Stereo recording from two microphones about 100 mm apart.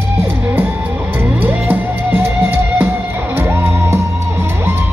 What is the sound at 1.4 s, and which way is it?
Music, 20° right (ahead or behind).